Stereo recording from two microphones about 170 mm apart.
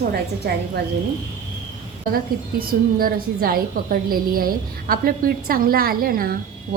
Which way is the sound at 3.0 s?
60° right (ahead or behind).